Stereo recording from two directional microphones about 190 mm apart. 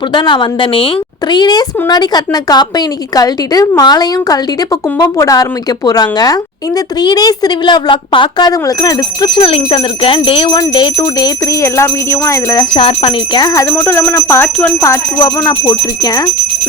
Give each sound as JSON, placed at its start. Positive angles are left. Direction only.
{"t": 0.1, "sound": "a woman's voice", "side_deg": 25}